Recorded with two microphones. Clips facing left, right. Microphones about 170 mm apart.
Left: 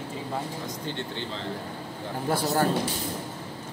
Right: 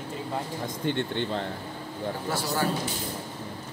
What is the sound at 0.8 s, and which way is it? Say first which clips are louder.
Speech: right 9 dB; 55° right (ahead or behind).